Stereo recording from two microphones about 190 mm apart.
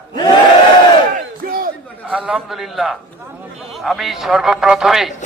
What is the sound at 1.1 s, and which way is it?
Battle cry, 50° right (ahead or behind).